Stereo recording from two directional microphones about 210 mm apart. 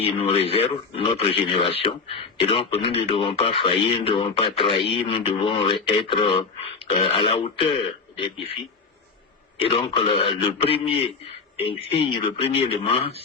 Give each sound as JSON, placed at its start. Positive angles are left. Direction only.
{"t": 0.0, "sound": "speech", "side_deg": 30}